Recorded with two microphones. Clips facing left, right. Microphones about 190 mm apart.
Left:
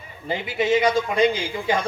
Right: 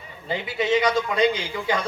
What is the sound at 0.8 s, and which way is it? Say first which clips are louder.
A man's voice: left 1 dB; 25° left (ahead or behind).